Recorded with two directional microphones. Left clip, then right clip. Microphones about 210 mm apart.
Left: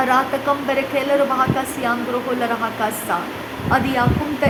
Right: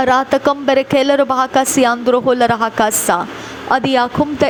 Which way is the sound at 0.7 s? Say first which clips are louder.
Right 8 dB; 40° right (ahead or behind).